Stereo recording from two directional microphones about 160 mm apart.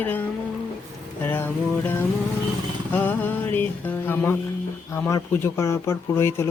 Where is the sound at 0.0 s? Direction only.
10° left (ahead or behind).